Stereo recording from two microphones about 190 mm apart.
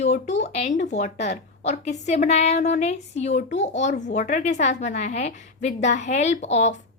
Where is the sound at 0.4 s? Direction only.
35° left (ahead or behind).